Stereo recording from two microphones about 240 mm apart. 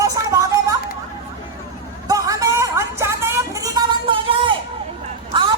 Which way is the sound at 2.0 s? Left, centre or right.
Centre.